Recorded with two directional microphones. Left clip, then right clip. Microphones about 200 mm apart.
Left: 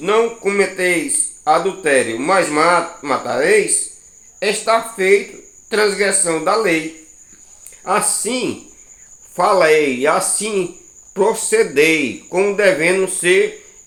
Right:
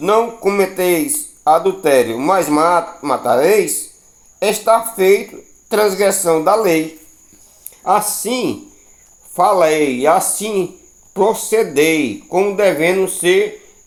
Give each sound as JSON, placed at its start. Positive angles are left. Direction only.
{"t": 0.0, "sound": "speech", "side_deg": -40}
{"t": 7.9, "sound": "speech", "side_deg": -35}